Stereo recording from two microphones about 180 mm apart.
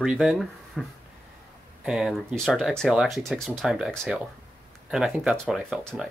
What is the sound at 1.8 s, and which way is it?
Speech, 5° right (ahead or behind).